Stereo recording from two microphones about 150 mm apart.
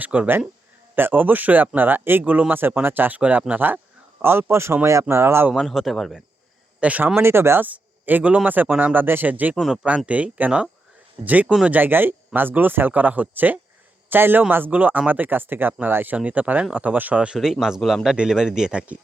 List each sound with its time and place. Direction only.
0.0 s speech: 10° right (ahead or behind)
5.5 s speech: centre (ahead or behind)